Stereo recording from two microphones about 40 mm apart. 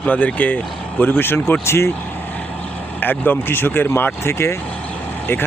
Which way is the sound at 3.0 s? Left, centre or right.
Left.